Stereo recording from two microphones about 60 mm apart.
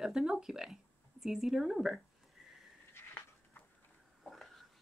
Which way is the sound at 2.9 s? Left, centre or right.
Left.